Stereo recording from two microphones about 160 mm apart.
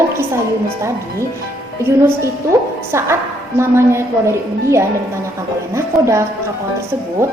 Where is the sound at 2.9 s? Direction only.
15° right (ahead or behind).